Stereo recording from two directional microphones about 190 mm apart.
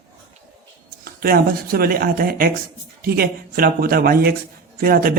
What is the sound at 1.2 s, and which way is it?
Speech, 50° right (ahead or behind).